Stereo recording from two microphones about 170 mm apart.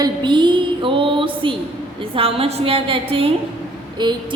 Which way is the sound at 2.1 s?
35° right (ahead or behind).